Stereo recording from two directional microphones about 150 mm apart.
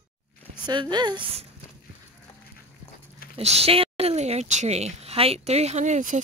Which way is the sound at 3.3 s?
40° right (ahead or behind).